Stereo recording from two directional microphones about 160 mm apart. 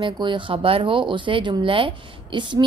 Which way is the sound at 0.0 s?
30° right (ahead or behind).